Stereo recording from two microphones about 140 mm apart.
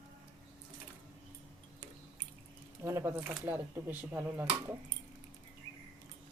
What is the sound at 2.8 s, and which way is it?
Speech, 20° right (ahead or behind).